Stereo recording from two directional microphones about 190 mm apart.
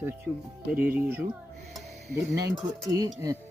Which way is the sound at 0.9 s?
10° right (ahead or behind).